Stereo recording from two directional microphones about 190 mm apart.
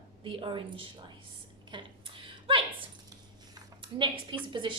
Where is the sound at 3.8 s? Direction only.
25° right (ahead or behind).